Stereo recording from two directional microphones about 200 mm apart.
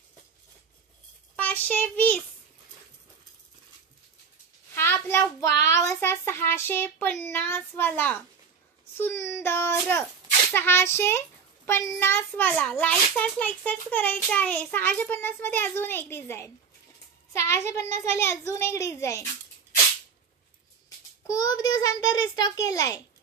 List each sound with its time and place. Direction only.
1.3 s a child's voice: 10° left (ahead or behind)
4.7 s a child's voice: 10° left (ahead or behind)
21.3 s a child's voice: 20° left (ahead or behind)